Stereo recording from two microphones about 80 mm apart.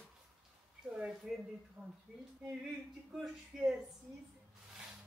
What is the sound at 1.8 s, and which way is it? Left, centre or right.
Speech, centre.